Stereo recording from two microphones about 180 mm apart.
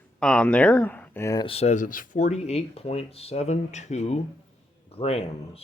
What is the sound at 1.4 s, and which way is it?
Speech, 35° left (ahead or behind).